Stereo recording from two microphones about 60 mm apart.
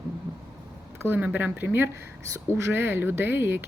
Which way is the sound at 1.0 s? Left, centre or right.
Right.